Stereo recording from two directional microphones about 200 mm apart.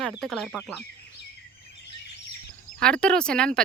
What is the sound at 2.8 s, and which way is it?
Speech, 5° left (ahead or behind).